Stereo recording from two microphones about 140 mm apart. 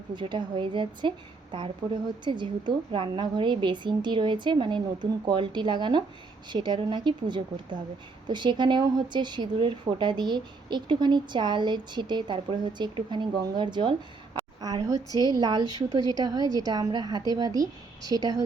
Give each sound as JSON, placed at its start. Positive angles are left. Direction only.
{"t": 0.1, "sound": "a woman's voice", "side_deg": -35}
{"t": 14.3, "sound": "a sound", "side_deg": -30}
{"t": 15.2, "sound": "a woman's voice", "side_deg": -30}